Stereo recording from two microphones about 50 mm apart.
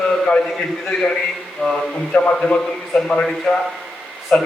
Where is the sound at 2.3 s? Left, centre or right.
Centre.